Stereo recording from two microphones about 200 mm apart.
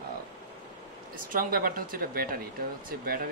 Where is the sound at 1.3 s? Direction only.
45° right (ahead or behind).